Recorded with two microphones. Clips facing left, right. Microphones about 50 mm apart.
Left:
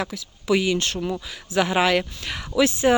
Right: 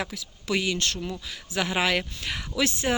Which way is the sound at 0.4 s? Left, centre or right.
Centre.